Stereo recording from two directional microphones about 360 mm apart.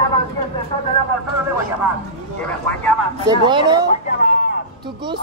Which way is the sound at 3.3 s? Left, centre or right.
Centre.